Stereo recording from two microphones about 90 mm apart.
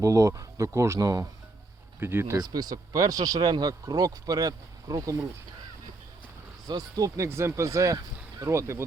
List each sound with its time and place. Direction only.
0.0 s speech: 35° right (ahead or behind)
2.0 s speech: 25° right (ahead or behind)
2.4 s speech: 45° right (ahead or behind)
6.7 s speech: 40° right (ahead or behind)
7.3 s speech: 30° right (ahead or behind)